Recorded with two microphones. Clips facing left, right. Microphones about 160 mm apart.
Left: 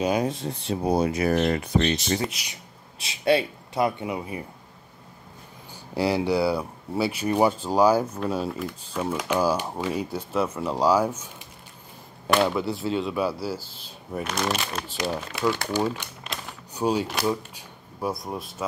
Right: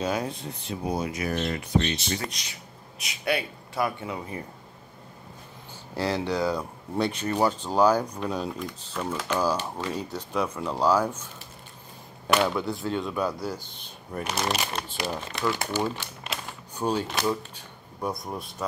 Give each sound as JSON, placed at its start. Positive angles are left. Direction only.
{"t": 0.0, "sound": "speech", "side_deg": 15}
{"t": 0.7, "sound": "speech", "side_deg": 35}
{"t": 1.3, "sound": "speech", "side_deg": 60}
{"t": 2.4, "sound": "speech", "side_deg": 5}
{"t": 3.0, "sound": "speech", "side_deg": 30}
{"t": 5.9, "sound": "speech", "side_deg": 10}
{"t": 14.2, "sound": "speech", "side_deg": -10}
{"t": 15.0, "sound": "speech", "side_deg": 10}
{"t": 16.7, "sound": "shuffling cards", "side_deg": 10}
{"t": 18.1, "sound": "speech", "side_deg": 0}